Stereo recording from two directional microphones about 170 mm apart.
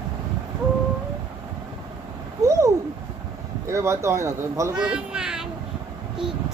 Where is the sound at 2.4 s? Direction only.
20° right (ahead or behind).